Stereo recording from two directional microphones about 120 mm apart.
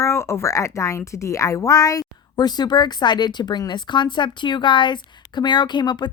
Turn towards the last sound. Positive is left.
turn(degrees=40)  # may be behind; listen again after turning